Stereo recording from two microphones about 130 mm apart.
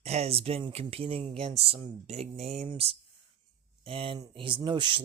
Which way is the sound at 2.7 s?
45° right (ahead or behind).